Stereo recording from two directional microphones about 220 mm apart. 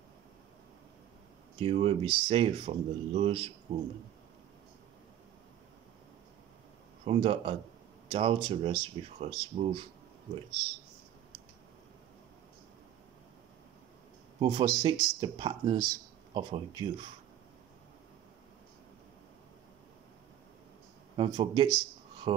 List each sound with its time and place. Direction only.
1.6 s speech: 25° right (ahead or behind)
7.1 s speech: 25° right (ahead or behind)
14.4 s speech: 20° right (ahead or behind)
21.2 s speech: 20° right (ahead or behind)